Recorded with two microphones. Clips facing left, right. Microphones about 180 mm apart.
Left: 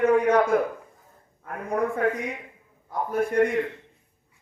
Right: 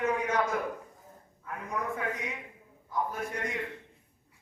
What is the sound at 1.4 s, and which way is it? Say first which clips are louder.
A man's voice: left 9 dB; 55° left (ahead or behind).